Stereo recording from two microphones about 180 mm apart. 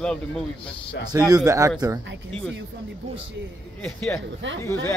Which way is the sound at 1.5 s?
15° right (ahead or behind).